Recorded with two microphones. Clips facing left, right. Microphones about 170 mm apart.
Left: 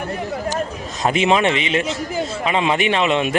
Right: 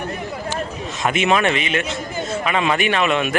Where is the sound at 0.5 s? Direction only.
40° left (ahead or behind).